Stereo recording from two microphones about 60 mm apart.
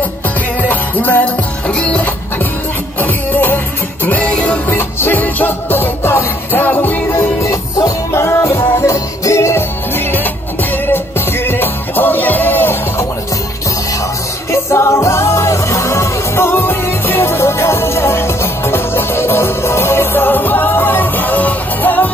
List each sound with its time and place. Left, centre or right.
0.6 s music: left
1.7 s music: centre
3.0 s music: left
4.3 s music: centre
4.6 s music: left
7.4 s music: left
8.1 s music: left
14.5 s music: left